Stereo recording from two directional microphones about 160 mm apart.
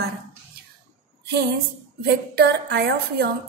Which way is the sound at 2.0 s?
85° right.